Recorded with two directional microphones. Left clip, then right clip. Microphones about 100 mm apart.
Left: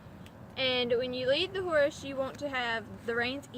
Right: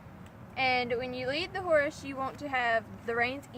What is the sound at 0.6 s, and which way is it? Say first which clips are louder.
Speech: even; 80° right.